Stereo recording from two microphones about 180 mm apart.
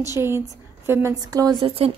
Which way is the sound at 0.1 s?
15° right (ahead or behind).